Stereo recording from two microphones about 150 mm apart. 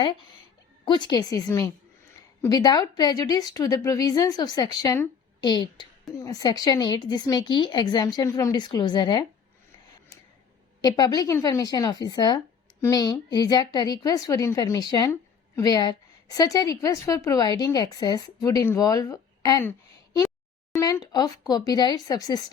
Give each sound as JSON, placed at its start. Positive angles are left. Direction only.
{"t": 0.9, "sound": "a woman's voice", "side_deg": 30}
{"t": 10.8, "sound": "a woman's voice", "side_deg": 25}
{"t": 20.7, "sound": "a woman's voice", "side_deg": 20}